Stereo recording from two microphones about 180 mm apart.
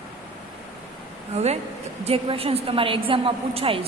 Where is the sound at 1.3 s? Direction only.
35° right (ahead or behind).